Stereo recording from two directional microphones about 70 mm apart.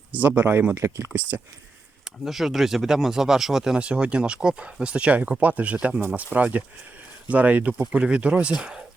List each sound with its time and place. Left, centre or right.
0.1 s speech: right
0.7 s speech: right
2.0 s speech: centre